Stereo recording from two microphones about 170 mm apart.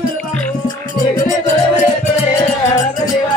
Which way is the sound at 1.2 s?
45° left (ahead or behind).